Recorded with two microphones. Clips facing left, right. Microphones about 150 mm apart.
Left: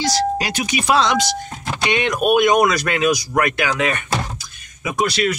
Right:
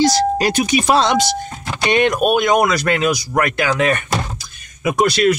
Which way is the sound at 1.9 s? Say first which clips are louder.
Right 5 dB; 50° right (ahead or behind).